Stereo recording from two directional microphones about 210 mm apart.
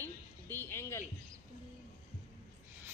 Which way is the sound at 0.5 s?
10° left (ahead or behind).